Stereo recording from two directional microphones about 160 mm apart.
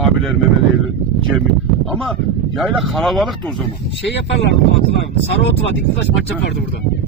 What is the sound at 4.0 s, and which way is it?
Speech, 90° left.